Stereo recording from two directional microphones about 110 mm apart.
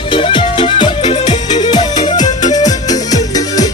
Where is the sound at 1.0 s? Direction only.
70° left (ahead or behind).